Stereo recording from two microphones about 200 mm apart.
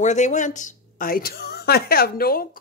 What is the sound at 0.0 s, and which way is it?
A woman's voice, 35° left (ahead or behind).